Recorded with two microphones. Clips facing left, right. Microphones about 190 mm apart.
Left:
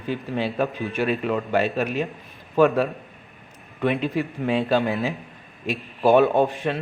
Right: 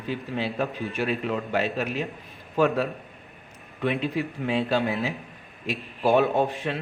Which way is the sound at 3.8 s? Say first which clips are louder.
Left 3 dB; 55° left (ahead or behind).